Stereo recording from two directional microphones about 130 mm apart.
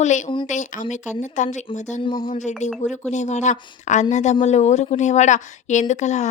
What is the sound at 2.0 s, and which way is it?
Speech, 40° left (ahead or behind).